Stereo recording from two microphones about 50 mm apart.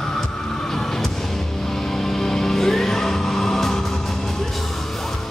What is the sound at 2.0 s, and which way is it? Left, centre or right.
Music, centre.